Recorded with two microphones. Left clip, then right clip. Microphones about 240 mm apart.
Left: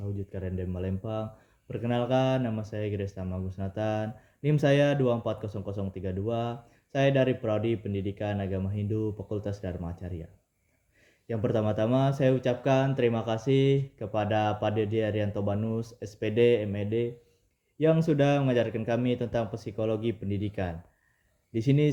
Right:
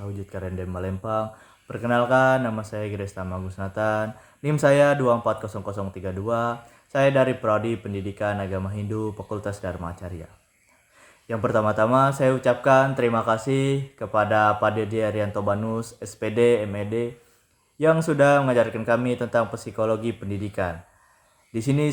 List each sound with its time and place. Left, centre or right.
0.3 s speech: right
11.3 s speech: right